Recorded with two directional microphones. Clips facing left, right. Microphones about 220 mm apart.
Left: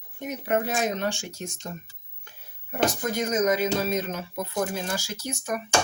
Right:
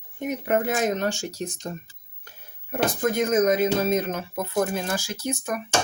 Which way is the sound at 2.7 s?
55° right (ahead or behind).